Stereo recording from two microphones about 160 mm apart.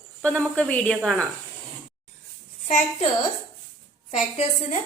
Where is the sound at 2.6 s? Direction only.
45° left (ahead or behind).